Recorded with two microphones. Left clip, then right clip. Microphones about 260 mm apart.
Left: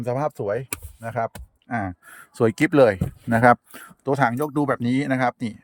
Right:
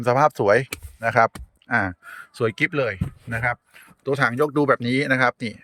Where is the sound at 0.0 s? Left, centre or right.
Centre.